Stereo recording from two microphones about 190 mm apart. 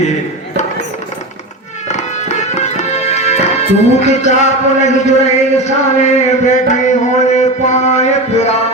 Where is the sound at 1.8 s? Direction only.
35° left (ahead or behind).